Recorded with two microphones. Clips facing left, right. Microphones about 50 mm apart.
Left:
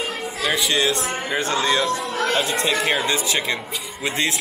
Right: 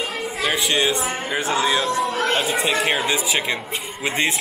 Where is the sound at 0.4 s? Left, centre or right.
Centre.